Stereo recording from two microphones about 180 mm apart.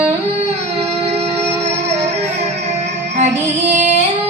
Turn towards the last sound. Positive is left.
turn(degrees=-40)  # may be behind; listen again after turning